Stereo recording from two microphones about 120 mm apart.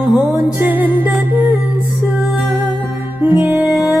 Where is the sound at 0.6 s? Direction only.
15° right (ahead or behind).